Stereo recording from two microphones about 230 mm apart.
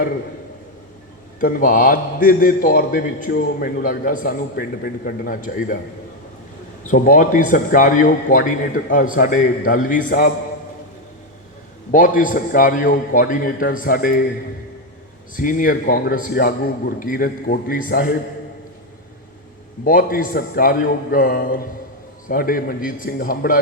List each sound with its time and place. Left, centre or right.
1.4 s a man's voice: left
6.9 s a man's voice: left
11.9 s a man's voice: left
15.4 s a man's voice: left
19.8 s a man's voice: left